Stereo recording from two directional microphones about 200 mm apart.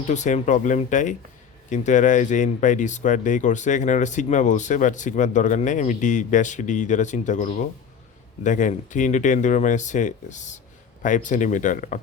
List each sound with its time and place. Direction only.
0.1 s speech: 35° left (ahead or behind)